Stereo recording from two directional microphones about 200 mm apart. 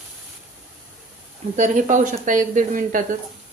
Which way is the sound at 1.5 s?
40° right (ahead or behind).